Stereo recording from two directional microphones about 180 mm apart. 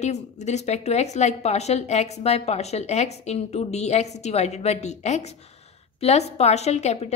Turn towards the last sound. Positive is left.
turn(degrees=40)  # may be behind; listen again after turning